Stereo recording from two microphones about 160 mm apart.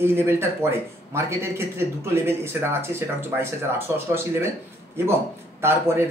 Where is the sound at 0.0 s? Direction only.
15° right (ahead or behind).